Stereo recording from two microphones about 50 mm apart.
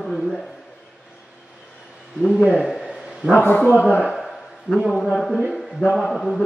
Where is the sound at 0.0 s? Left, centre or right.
Centre.